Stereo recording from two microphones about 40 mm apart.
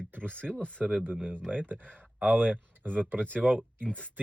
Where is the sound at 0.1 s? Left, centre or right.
Right.